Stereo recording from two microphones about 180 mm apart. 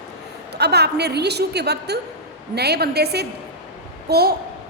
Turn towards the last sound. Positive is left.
turn(degrees=-60)  # may be behind; listen again after turning